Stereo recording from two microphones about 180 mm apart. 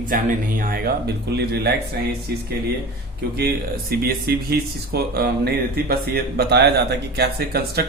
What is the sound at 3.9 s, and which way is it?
Speech, 55° right (ahead or behind).